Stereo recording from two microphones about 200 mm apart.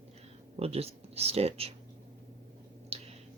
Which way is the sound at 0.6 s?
30° right (ahead or behind).